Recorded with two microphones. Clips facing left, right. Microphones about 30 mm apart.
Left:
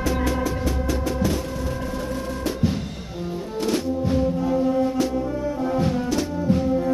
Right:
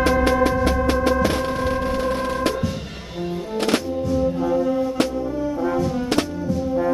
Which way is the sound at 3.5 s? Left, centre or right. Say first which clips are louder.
Right 3 dB; right.